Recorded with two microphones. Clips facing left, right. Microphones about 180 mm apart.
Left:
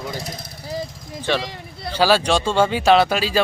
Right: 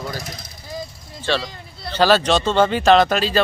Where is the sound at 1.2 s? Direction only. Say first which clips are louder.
Even; 15° left (ahead or behind).